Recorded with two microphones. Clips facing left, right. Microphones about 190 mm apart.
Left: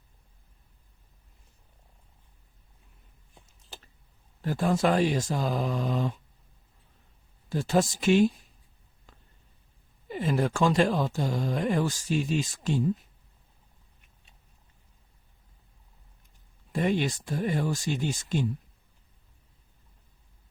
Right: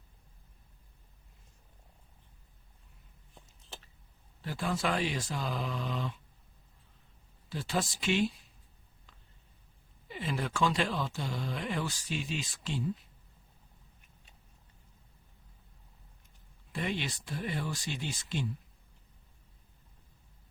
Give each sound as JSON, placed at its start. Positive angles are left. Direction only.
{"t": 4.4, "sound": "speech", "side_deg": 45}
{"t": 7.5, "sound": "speech", "side_deg": 45}
{"t": 9.1, "sound": "a sound", "side_deg": 45}
{"t": 10.1, "sound": "speech", "side_deg": 45}
{"t": 16.7, "sound": "speech", "side_deg": 45}